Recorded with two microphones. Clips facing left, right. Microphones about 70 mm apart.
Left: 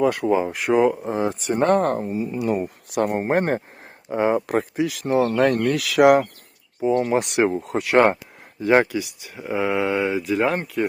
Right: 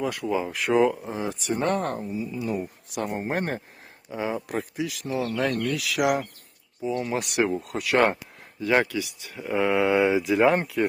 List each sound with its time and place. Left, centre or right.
0.0 s speech: left
0.4 s speech: left
1.0 s speech: left
4.1 s speech: left
6.8 s speech: left
7.1 s speech: left
9.6 s speech: centre